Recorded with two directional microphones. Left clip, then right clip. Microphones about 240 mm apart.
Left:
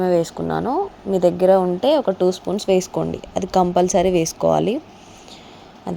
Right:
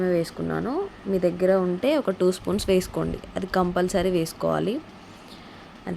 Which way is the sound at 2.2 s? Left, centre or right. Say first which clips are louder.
Left 4 dB; centre.